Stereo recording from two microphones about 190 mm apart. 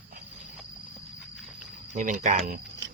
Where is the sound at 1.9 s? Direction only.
40° right (ahead or behind).